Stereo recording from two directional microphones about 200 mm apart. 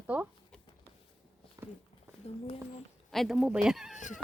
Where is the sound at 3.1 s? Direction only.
Centre (ahead or behind).